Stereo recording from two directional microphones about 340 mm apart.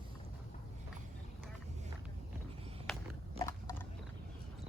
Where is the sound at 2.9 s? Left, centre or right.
Centre.